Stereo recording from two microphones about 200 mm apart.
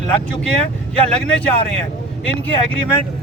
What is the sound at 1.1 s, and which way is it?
Speech, 5° left (ahead or behind).